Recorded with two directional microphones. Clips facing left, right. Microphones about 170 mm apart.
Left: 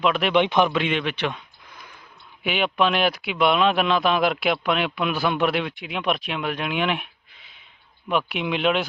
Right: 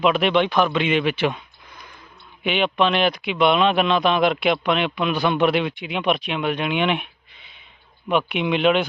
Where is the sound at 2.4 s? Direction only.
5° left (ahead or behind).